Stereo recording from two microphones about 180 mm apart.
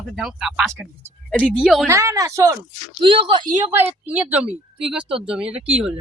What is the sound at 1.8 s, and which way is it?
Speech, 15° right (ahead or behind).